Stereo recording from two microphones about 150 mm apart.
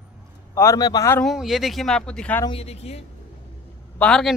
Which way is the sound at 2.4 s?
40° left (ahead or behind).